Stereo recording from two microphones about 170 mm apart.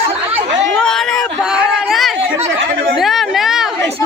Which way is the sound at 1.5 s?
Centre (ahead or behind).